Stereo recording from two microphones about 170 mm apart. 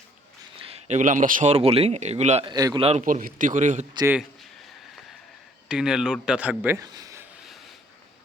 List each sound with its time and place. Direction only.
0.5 s a man's voice: 35° right (ahead or behind)
2.5 s a man's voice: 25° right (ahead or behind)
3.0 s a man's voice: 50° right (ahead or behind)
5.6 s speech: 5° right (ahead or behind)
6.7 s a sound: 20° right (ahead or behind)